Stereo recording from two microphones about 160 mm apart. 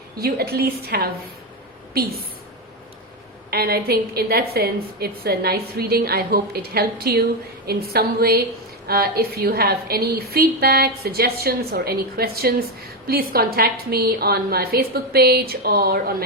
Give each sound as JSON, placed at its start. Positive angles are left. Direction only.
{"t": 0.2, "sound": "a woman's voice", "side_deg": -75}
{"t": 3.5, "sound": "a woman's voice", "side_deg": -75}